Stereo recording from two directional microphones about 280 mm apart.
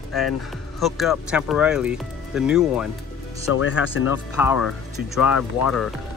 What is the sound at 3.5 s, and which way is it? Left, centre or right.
Speech, left.